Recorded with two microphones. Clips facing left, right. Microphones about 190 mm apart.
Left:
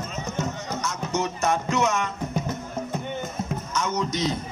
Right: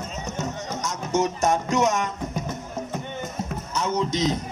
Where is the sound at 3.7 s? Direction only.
35° right (ahead or behind).